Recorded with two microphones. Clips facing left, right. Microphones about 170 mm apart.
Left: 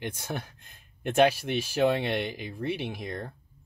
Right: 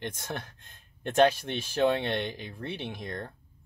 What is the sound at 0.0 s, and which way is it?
Speech, 10° left (ahead or behind).